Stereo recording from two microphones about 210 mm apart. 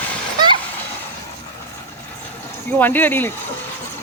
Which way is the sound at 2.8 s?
10° left (ahead or behind).